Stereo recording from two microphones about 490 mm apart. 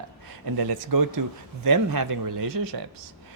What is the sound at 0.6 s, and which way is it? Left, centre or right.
Speech, right.